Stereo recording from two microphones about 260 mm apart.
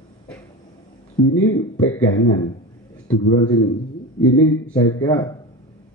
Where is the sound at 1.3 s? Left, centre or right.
Left.